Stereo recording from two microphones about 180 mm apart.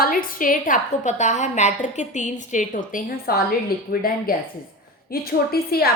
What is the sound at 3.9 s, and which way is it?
A woman's voice, 55° left (ahead or behind).